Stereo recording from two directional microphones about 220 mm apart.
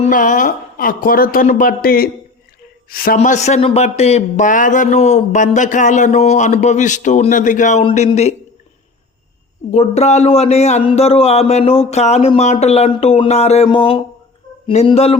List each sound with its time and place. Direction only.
0.1 s speech: 35° left (ahead or behind)
3.2 s speech: 30° left (ahead or behind)
9.7 s speech: 30° left (ahead or behind)